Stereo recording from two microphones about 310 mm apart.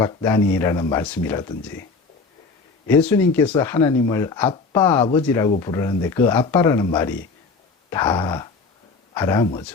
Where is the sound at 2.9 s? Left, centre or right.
Centre.